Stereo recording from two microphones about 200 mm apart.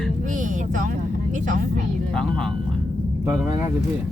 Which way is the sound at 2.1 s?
5° left (ahead or behind).